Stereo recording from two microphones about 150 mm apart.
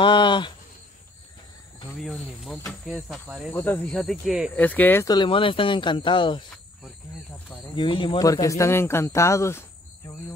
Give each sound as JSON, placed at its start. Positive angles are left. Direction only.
{"t": 0.0, "sound": "speech", "side_deg": 30}
{"t": 2.0, "sound": "speech", "side_deg": 0}
{"t": 3.5, "sound": "speech", "side_deg": 10}
{"t": 4.6, "sound": "speech", "side_deg": 10}
{"t": 5.0, "sound": "speech", "side_deg": 30}
{"t": 7.7, "sound": "speech", "side_deg": 35}
{"t": 8.2, "sound": "speech", "side_deg": 25}